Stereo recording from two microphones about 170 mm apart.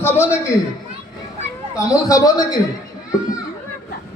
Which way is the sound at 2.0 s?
20° left (ahead or behind).